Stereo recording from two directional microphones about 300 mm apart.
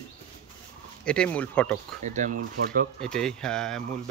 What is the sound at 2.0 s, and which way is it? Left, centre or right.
Speech, right.